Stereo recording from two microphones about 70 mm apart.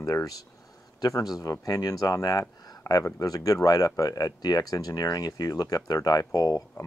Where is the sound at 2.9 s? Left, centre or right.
Left.